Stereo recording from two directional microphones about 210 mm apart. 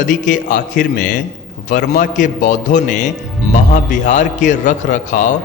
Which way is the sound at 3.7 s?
35° left (ahead or behind).